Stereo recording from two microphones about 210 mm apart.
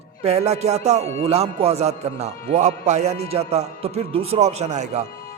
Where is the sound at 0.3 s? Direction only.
30° right (ahead or behind).